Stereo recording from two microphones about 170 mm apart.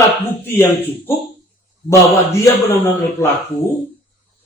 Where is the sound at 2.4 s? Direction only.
15° left (ahead or behind).